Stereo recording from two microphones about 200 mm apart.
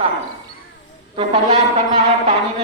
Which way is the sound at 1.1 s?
30° right (ahead or behind).